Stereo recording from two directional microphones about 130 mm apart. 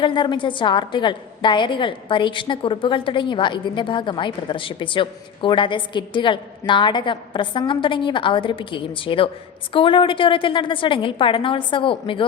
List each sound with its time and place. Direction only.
0.0 s a woman's voice: 40° left (ahead or behind)